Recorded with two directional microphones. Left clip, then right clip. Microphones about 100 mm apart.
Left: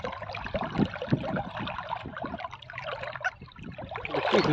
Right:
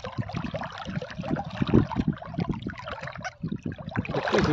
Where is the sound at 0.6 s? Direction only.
40° left (ahead or behind).